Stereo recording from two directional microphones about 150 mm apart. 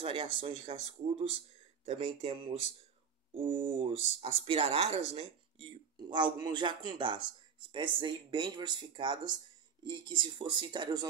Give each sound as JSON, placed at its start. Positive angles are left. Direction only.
{"t": 0.0, "sound": "speech", "side_deg": -35}